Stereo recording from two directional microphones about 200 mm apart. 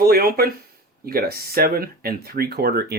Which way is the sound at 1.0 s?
50° right (ahead or behind).